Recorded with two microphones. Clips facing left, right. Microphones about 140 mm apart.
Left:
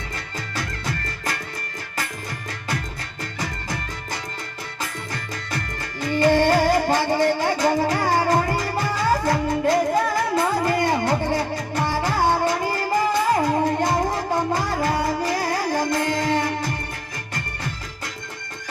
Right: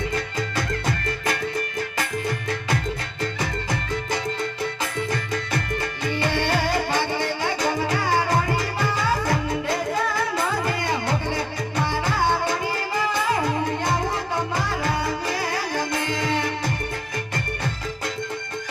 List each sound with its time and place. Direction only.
6.1 s music: 45° left (ahead or behind)